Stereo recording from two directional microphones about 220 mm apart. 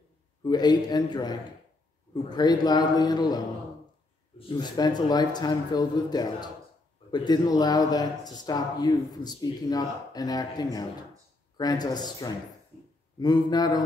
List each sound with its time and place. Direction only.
0.4 s speech: 20° left (ahead or behind)